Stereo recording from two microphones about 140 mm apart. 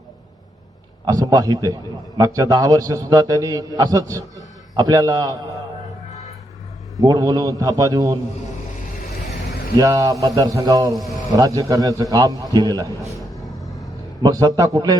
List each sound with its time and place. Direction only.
1.0 s a man's voice: 25° right (ahead or behind)
6.9 s a man's voice: 25° right (ahead or behind)
9.7 s a man's voice: 25° right (ahead or behind)
13.1 s rumble: centre (ahead or behind)
14.2 s a man's voice: 30° right (ahead or behind)